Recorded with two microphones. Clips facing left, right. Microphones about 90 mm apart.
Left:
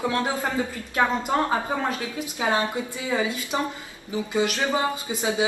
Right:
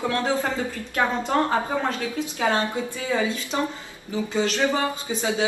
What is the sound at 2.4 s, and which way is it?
A man's voice, 15° left (ahead or behind).